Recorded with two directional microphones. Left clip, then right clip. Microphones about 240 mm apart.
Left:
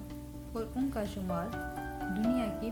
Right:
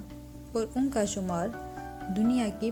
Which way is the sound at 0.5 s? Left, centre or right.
Right.